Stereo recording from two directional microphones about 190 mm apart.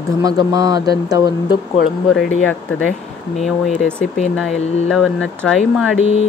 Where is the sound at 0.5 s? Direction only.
20° right (ahead or behind).